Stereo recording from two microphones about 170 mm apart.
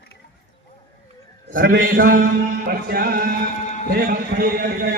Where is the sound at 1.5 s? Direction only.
55° right (ahead or behind).